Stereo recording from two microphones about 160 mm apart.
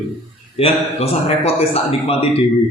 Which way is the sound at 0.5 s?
40° left (ahead or behind).